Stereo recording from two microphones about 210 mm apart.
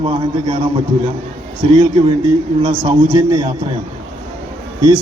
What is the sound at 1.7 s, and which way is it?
A man's voice, 20° right (ahead or behind).